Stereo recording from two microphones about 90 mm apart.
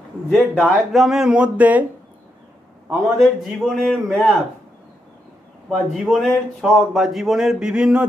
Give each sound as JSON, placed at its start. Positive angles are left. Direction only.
{"t": 0.3, "sound": "a man's voice", "side_deg": 15}
{"t": 0.9, "sound": "speech", "side_deg": -5}
{"t": 2.9, "sound": "speech", "side_deg": 0}
{"t": 5.7, "sound": "speech", "side_deg": 0}